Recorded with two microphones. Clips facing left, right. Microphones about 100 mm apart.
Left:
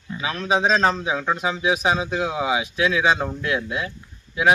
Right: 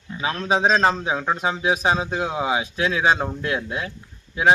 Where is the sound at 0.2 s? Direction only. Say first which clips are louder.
Right 1 dB; 35° right (ahead or behind).